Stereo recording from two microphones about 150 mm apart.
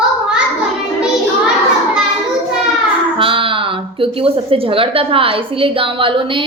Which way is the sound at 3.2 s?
35° right (ahead or behind).